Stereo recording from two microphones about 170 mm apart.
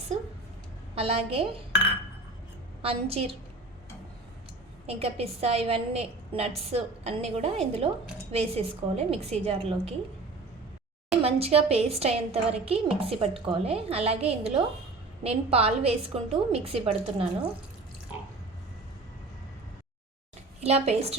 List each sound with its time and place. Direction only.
0.9 s a woman's voice: 35° right (ahead or behind)
2.8 s a woman's voice: 35° right (ahead or behind)
4.9 s a woman's voice: 35° right (ahead or behind)
11.1 s a woman's voice: 35° right (ahead or behind)
20.6 s a woman's voice: 40° right (ahead or behind)